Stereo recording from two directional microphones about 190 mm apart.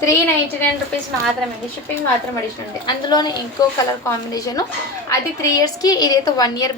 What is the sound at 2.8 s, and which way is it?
A woman's voice, 20° left (ahead or behind).